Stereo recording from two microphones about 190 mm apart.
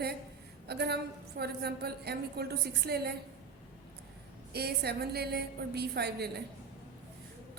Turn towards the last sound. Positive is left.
turn(degrees=-60)  # may be behind; listen again after turning